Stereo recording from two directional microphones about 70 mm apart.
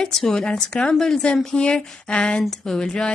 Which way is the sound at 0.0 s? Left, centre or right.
Centre.